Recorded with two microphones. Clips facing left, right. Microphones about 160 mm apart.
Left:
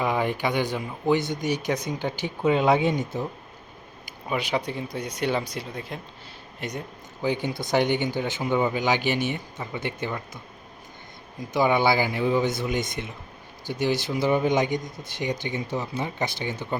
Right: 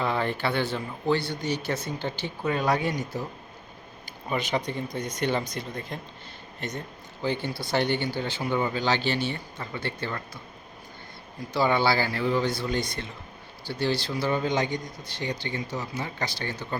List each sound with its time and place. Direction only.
0.0 s speech: 10° left (ahead or behind)
2.4 s speech: 25° left (ahead or behind)
4.0 s speech: 10° left (ahead or behind)
11.5 s speech: 15° left (ahead or behind)